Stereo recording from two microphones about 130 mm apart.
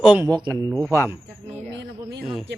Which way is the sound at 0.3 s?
35° right (ahead or behind).